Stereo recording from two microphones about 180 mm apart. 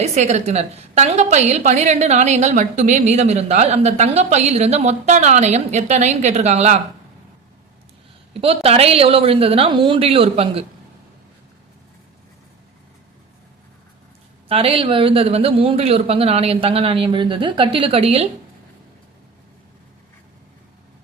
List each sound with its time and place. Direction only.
0.0 s a woman's voice: 40° right (ahead or behind)
8.4 s a woman's voice: 35° right (ahead or behind)
14.4 s a woman's voice: 30° right (ahead or behind)